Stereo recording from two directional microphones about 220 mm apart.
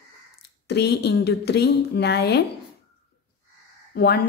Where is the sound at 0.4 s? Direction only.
50° left (ahead or behind).